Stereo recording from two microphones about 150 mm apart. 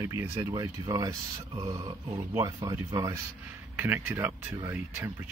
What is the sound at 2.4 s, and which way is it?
Speech, 25° right (ahead or behind).